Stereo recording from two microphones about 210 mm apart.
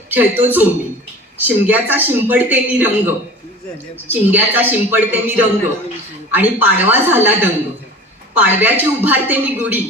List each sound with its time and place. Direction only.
0.1 s a woman's voice: 10° right (ahead or behind)
4.1 s a woman's voice: 10° right (ahead or behind)